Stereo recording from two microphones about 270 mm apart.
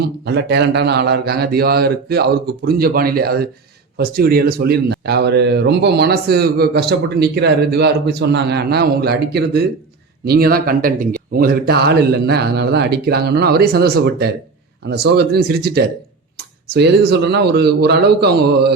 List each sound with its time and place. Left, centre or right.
0.3 s speech: right
17.1 s speech: right